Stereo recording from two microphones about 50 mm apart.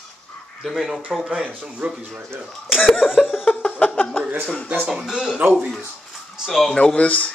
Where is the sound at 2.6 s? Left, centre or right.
Centre.